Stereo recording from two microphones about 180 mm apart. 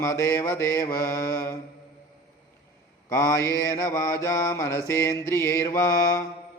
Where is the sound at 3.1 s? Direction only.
15° left (ahead or behind).